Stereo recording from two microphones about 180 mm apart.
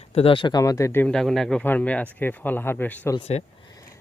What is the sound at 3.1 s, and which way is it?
Speech, 35° left (ahead or behind).